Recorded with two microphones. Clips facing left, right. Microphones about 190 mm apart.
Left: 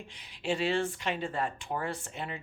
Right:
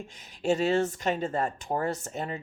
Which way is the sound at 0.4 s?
45° right (ahead or behind).